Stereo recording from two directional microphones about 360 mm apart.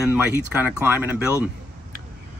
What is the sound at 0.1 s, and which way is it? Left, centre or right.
Speech, centre.